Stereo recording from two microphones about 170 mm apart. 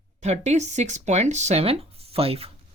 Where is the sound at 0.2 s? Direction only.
40° right (ahead or behind).